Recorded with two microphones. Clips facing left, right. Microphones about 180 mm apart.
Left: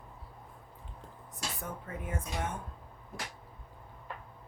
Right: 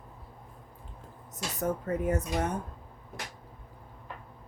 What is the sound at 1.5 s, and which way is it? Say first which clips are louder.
Speech: right 11 dB; 40° right (ahead or behind).